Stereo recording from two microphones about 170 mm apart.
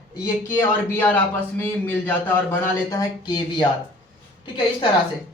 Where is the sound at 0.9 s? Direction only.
10° left (ahead or behind).